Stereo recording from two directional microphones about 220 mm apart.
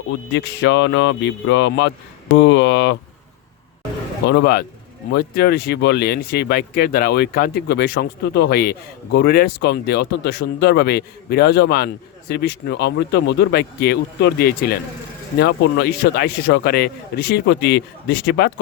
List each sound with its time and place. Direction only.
0.3 s speech: 55° left (ahead or behind)
4.3 s speech: 50° left (ahead or behind)